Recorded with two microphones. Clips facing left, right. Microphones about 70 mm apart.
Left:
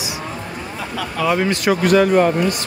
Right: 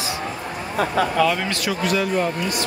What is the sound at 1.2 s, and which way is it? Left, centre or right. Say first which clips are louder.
Speech: left 4 dB; centre.